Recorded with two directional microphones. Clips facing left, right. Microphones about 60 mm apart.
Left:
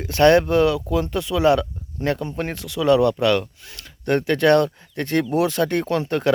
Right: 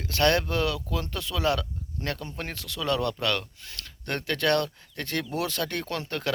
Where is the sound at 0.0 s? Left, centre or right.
Left.